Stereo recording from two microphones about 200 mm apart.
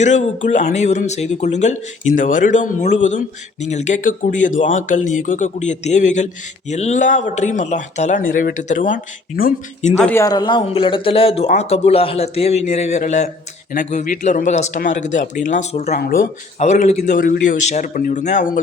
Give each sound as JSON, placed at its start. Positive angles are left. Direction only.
{"t": 0.0, "sound": "speech", "side_deg": 35}
{"t": 10.0, "sound": "speech", "side_deg": 10}
{"t": 16.0, "sound": "speech", "side_deg": 50}
{"t": 16.6, "sound": "speech", "side_deg": 35}